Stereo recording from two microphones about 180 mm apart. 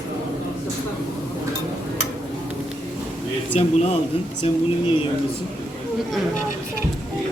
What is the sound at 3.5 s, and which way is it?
Speech, 35° left (ahead or behind).